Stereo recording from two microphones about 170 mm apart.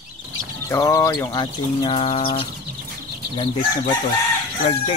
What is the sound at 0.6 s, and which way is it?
Speech, 20° left (ahead or behind).